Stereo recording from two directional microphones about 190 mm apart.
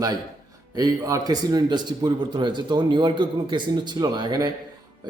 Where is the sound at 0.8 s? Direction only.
20° right (ahead or behind).